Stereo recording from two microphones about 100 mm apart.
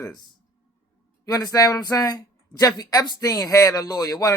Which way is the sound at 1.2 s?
40° left (ahead or behind).